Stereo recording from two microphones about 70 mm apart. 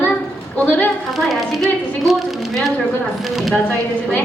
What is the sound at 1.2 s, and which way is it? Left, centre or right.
A woman's voice, centre.